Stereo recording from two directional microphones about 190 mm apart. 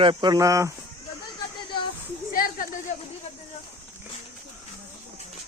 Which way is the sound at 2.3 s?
50° left (ahead or behind).